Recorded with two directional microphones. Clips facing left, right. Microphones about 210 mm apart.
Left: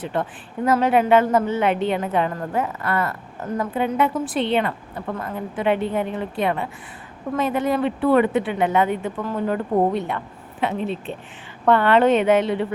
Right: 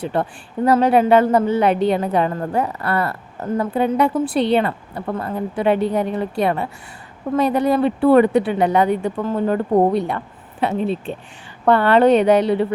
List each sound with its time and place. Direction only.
0.1 s a woman's voice: 35° right (ahead or behind)